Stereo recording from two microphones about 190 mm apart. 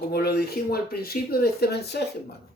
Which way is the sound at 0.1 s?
55° left (ahead or behind).